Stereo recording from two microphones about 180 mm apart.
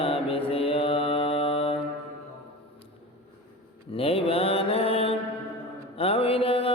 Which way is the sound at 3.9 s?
30° left (ahead or behind).